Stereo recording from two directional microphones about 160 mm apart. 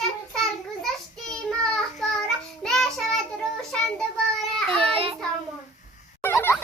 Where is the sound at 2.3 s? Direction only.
5° left (ahead or behind).